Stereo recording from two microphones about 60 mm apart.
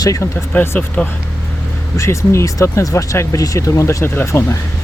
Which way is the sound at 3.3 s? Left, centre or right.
Left.